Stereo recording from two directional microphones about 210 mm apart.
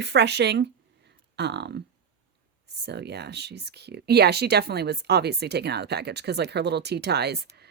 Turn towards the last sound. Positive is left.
turn(degrees=-50)  # may be behind; listen again after turning